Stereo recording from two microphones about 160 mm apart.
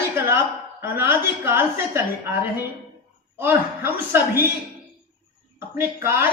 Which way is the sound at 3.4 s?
15° right (ahead or behind).